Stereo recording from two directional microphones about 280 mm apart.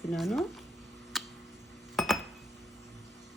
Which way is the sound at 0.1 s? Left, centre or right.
Centre.